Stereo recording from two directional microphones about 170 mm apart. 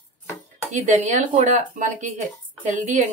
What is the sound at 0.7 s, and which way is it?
A woman's voice, 45° right (ahead or behind).